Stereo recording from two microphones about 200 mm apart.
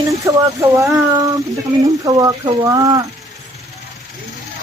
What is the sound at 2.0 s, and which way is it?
Speech, 20° right (ahead or behind).